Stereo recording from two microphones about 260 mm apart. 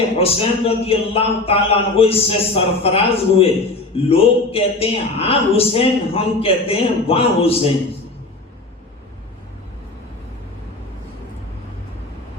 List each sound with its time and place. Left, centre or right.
0.2 s a man's voice: left